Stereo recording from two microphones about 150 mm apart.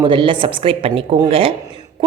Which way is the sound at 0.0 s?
35° right (ahead or behind).